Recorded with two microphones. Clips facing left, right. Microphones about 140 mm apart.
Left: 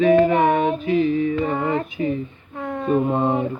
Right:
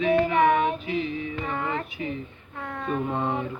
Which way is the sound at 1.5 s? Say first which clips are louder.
Left 7 dB; 40° left (ahead or behind).